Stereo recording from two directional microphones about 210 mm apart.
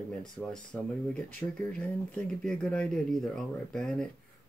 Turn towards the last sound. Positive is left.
turn(degrees=5)  # may be behind; listen again after turning